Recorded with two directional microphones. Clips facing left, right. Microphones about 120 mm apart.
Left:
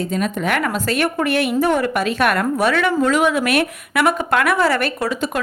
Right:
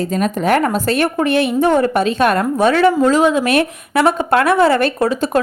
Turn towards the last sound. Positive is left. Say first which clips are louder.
# right 6 dB
turn(degrees=-30)  # may be behind; listen again after turning